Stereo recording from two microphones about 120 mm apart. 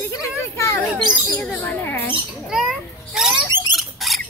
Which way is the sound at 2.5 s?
5° right (ahead or behind).